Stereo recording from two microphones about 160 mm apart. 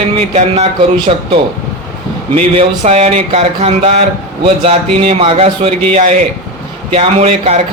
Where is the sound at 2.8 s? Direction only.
45° right (ahead or behind).